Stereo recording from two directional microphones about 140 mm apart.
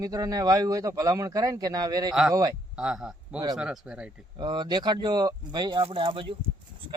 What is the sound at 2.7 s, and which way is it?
A man's voice, 5° right (ahead or behind).